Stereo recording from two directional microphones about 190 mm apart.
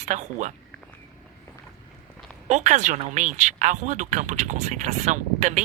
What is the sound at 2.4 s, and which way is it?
Speech, 40° right (ahead or behind).